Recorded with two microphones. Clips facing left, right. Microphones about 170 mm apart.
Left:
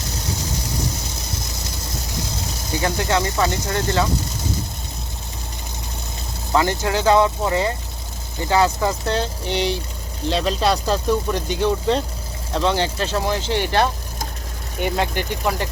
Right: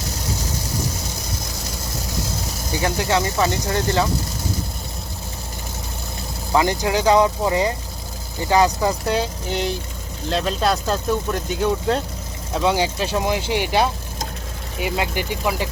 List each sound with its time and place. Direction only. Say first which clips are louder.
2.8 s speech: even; 20° right (ahead or behind)
6.5 s speech: right 1 dB; 20° right (ahead or behind)